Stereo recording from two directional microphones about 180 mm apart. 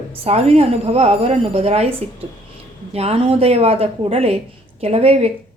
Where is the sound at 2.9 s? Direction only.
35° right (ahead or behind).